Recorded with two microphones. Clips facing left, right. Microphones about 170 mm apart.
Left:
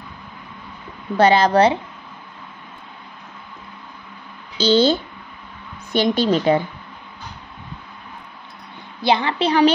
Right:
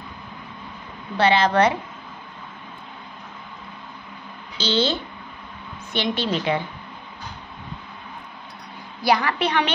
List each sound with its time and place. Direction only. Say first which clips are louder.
1.1 s a woman's voice: left 4 dB; 40° left (ahead or behind)
4.6 s a woman's voice: left 7 dB; 40° left (ahead or behind)
5.9 s a woman's voice: left 7 dB; 40° left (ahead or behind)
9.0 s a woman's voice: left 2 dB; 25° left (ahead or behind)